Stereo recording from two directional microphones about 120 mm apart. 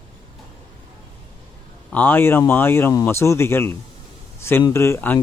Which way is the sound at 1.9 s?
15° left (ahead or behind).